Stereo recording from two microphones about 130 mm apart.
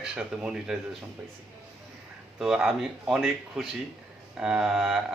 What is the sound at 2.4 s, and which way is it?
Speech, centre (ahead or behind).